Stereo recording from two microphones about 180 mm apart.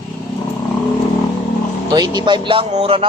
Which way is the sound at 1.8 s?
25° right (ahead or behind).